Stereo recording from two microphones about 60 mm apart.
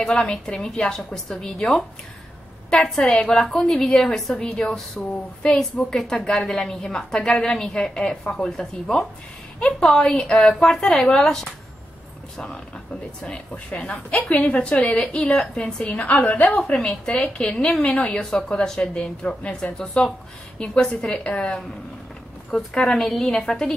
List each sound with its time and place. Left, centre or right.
0.0 s a woman's voice: centre
22.8 s a woman's voice: centre